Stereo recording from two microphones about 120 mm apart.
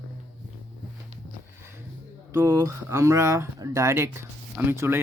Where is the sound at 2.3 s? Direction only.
30° right (ahead or behind).